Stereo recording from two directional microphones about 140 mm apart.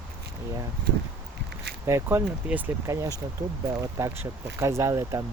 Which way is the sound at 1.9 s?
20° right (ahead or behind).